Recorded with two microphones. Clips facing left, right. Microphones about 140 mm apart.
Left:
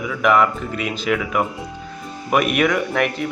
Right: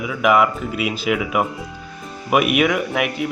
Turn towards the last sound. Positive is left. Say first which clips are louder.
# left 1 dB
turn(degrees=-10)  # may be behind; listen again after turning